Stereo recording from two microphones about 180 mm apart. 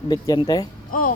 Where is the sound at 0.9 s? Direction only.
50° left (ahead or behind).